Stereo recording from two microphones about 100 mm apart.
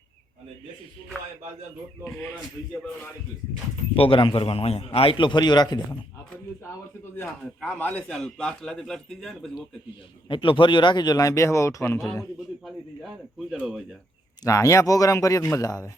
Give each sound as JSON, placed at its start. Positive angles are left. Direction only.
{"t": 2.1, "sound": "speech", "side_deg": 25}
{"t": 3.9, "sound": "a man's voice", "side_deg": 65}
{"t": 5.4, "sound": "speech", "side_deg": 45}
{"t": 7.8, "sound": "a man's voice", "side_deg": 15}
{"t": 10.2, "sound": "speech", "side_deg": 60}
{"t": 13.5, "sound": "a man's voice", "side_deg": -5}
{"t": 14.4, "sound": "a man's voice", "side_deg": 30}